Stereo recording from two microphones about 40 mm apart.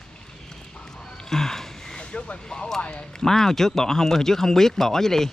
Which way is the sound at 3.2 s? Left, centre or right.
Centre.